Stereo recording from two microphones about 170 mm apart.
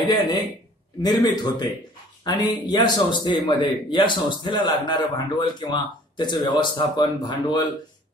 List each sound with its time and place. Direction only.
1.0 s a man's voice: 25° left (ahead or behind)